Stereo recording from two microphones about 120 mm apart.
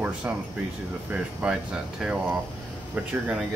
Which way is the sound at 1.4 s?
10° right (ahead or behind).